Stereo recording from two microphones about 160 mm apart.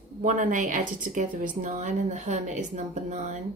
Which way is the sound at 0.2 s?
55° right (ahead or behind).